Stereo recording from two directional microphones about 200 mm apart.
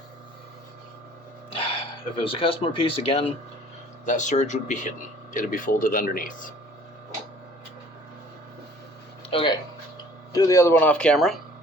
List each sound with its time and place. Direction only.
1.5 s throat clearing: 25° left (ahead or behind)
2.2 s speech: 25° left (ahead or behind)
4.0 s speech: 40° left (ahead or behind)
9.3 s speech: 25° left (ahead or behind); by 11.3 s centre (ahead or behind)